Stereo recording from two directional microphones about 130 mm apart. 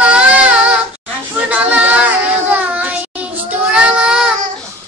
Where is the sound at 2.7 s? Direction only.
10° right (ahead or behind).